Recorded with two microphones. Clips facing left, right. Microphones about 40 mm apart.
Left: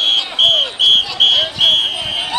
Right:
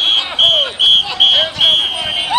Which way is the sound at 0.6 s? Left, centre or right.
Centre.